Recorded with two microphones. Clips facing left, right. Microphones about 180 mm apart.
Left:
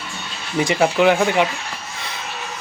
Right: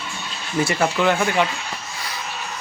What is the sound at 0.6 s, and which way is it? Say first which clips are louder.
Speech: left 4 dB; 15° left (ahead or behind).